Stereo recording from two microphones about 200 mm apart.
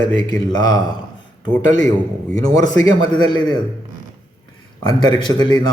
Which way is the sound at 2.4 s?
20° left (ahead or behind).